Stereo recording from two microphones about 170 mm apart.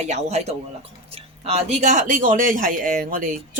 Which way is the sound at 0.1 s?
40° right (ahead or behind).